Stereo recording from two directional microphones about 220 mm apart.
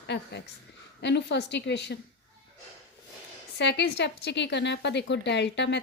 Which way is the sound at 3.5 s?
50° left (ahead or behind).